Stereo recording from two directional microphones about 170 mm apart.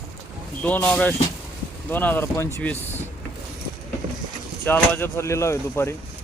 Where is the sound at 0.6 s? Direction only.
10° left (ahead or behind).